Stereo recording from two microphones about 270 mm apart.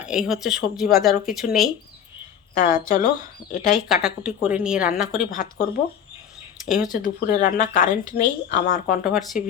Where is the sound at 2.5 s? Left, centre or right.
Left.